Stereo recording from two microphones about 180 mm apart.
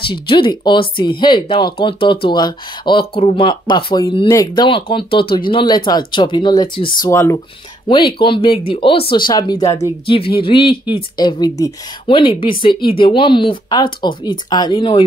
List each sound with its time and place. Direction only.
0.1 s speech: 25° left (ahead or behind)
7.1 s speech: 15° left (ahead or behind)
8.1 s speech: 30° left (ahead or behind)